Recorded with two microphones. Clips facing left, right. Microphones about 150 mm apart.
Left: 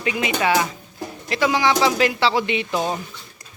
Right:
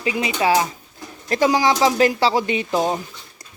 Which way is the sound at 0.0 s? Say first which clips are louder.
Right 1 dB; 35° right (ahead or behind).